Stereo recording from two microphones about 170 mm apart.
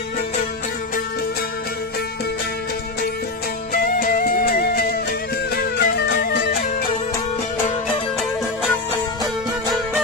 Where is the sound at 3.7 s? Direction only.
60° left (ahead or behind).